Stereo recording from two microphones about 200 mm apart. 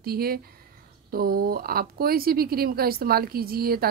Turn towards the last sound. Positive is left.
turn(degrees=-50)  # may be behind; listen again after turning